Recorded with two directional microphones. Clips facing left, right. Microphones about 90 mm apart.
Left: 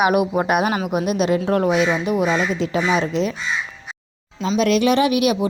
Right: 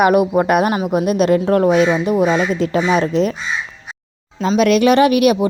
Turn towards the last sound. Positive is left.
turn(degrees=-55)  # may be behind; listen again after turning